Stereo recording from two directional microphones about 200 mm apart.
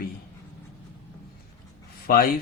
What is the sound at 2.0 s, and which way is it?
Speech, 45° left (ahead or behind).